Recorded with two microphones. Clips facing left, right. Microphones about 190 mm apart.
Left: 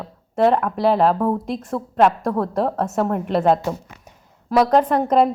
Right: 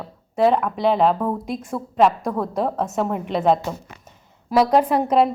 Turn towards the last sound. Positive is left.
turn(degrees=-5)  # may be behind; listen again after turning